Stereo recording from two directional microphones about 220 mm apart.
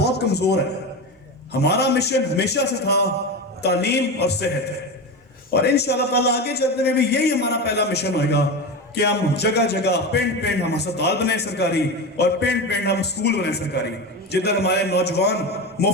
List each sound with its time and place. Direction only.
0.0 s a sound: 50° left (ahead or behind)
1.5 s a man's voice: 50° left (ahead or behind)
5.5 s a man's voice: 50° left (ahead or behind)